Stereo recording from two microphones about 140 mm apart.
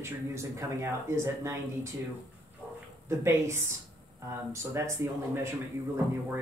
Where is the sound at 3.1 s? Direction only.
20° right (ahead or behind).